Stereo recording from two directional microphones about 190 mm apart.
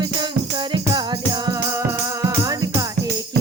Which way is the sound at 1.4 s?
20° right (ahead or behind).